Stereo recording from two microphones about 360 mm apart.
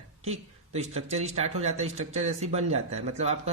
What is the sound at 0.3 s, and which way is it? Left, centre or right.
A man's voice, centre.